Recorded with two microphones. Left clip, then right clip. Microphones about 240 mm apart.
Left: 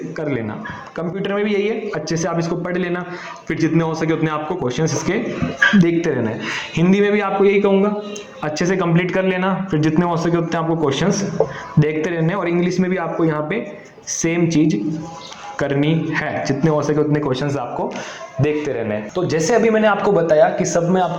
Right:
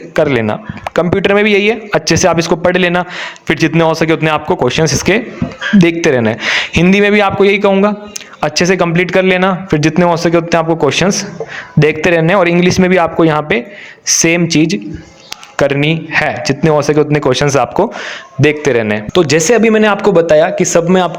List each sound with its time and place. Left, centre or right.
0.2 s a man's voice: right
4.8 s a man's voice: right
5.8 s a man's voice: right
8.8 s a man's voice: right